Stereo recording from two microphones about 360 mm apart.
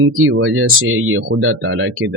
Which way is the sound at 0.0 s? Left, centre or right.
Right.